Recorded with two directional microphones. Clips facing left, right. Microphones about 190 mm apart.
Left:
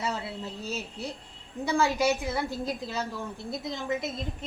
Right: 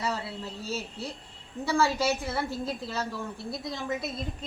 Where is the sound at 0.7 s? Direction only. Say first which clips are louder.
Right 2 dB; 15° left (ahead or behind).